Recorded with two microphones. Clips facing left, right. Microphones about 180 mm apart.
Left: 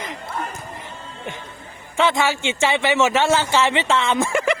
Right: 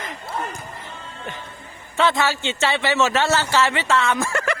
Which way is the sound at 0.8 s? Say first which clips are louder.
Left 1 dB; 15° left (ahead or behind).